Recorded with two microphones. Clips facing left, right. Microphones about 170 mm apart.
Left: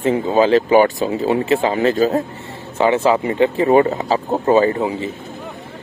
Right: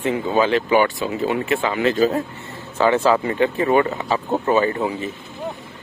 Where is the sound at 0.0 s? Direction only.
30° left (ahead or behind).